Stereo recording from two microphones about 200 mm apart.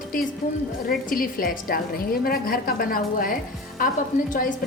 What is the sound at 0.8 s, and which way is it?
A woman's voice, 45° left (ahead or behind).